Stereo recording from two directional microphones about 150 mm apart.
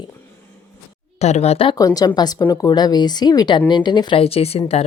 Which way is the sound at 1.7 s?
25° left (ahead or behind).